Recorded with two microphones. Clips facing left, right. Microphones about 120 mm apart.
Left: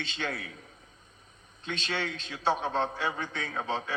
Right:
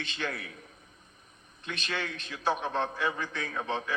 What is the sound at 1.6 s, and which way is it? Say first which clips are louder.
A man's voice: left 2 dB; 25° left (ahead or behind).